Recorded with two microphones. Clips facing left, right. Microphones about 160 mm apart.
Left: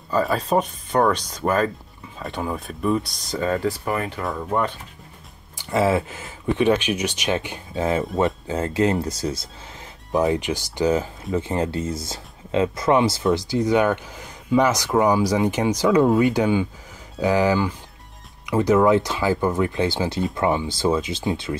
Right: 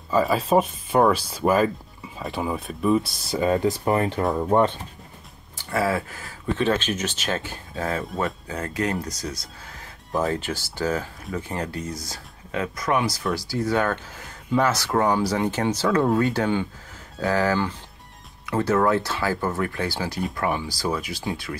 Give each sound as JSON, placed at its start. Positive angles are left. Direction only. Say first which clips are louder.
{"t": 0.1, "sound": "speech", "louder": "right 1 dB", "side_deg": 0}
{"t": 5.6, "sound": "speech", "louder": "left 4 dB", "side_deg": 20}
{"t": 10.1, "sound": "speech", "louder": "left 4 dB", "side_deg": 15}